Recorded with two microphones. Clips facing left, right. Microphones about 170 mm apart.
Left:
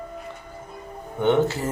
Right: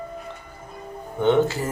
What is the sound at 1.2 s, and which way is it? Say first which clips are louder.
Speech: right 1 dB; 15° left (ahead or behind).